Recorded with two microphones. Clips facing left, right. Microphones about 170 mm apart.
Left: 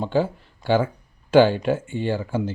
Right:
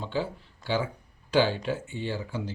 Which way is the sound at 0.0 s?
50° left (ahead or behind).